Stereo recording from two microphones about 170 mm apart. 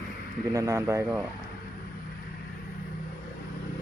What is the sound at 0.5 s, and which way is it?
Speech, 20° right (ahead or behind).